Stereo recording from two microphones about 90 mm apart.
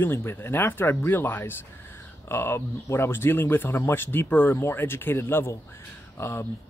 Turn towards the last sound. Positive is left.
turn(degrees=25)  # may be behind; listen again after turning